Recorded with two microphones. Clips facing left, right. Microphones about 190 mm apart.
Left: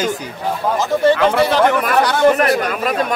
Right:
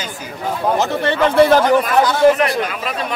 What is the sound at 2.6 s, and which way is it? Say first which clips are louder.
Speech: left 4 dB; 45° left (ahead or behind).